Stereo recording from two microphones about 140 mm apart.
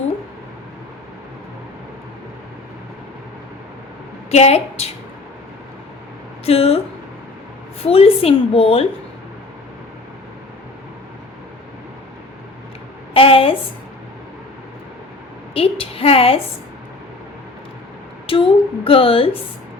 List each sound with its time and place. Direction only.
4.3 s a woman's voice: 50° left (ahead or behind)
6.4 s speech: 45° left (ahead or behind)
7.9 s a woman's voice: 45° left (ahead or behind)
13.1 s a sound: 40° left (ahead or behind)
15.5 s a woman's voice: 45° left (ahead or behind)
18.3 s speech: 40° left (ahead or behind)